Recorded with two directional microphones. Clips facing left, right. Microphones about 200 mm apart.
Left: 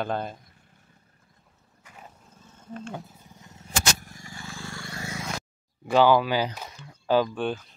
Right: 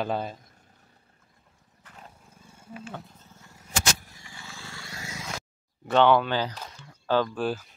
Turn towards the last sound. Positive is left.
turn(degrees=-5)  # may be behind; listen again after turning